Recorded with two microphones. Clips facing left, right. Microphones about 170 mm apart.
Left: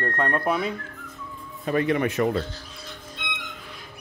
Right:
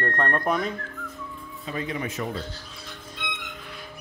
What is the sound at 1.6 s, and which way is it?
Speech, 65° left (ahead or behind).